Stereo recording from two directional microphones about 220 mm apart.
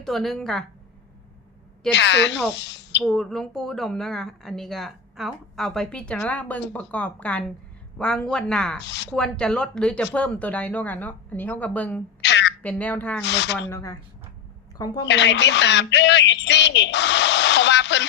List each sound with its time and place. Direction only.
0.0 s a woman's voice: centre (ahead or behind)
1.9 s speech: 55° left (ahead or behind)
3.0 s a woman's voice: centre (ahead or behind)
8.8 s speech: 50° left (ahead or behind)
9.1 s speech: 5° left (ahead or behind)
12.2 s a sound: 55° left (ahead or behind)
12.6 s speech: 5° left (ahead or behind)
13.2 s speech: 50° left (ahead or behind)
13.7 s speech: 15° left (ahead or behind)
15.0 s speech: 55° left (ahead or behind)